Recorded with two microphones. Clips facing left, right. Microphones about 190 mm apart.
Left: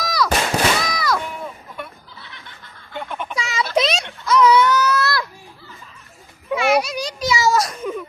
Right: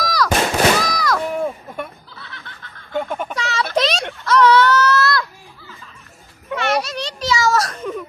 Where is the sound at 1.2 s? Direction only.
45° right (ahead or behind).